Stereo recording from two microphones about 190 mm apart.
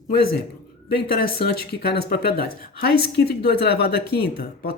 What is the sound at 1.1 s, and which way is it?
Speech, 50° left (ahead or behind).